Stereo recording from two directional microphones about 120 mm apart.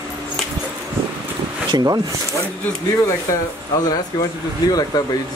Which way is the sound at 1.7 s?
35° right (ahead or behind).